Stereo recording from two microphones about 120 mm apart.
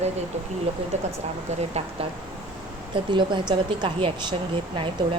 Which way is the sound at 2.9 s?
40° right (ahead or behind).